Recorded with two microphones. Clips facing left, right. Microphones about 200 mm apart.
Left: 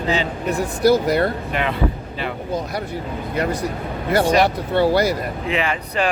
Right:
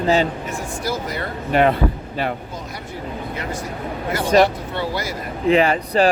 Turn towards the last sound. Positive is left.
turn(degrees=-35)  # may be behind; listen again after turning